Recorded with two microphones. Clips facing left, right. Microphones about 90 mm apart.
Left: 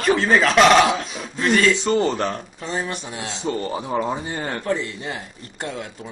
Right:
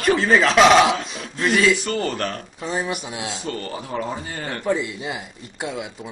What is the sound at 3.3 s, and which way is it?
Speech, 20° left (ahead or behind).